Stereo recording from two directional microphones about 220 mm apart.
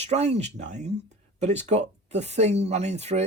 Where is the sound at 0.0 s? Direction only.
30° right (ahead or behind).